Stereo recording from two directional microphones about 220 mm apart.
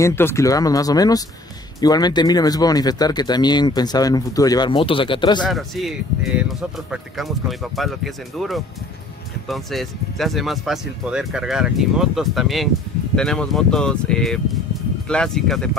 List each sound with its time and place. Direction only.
0.0 s speech: 10° left (ahead or behind)
5.5 s speech: centre (ahead or behind)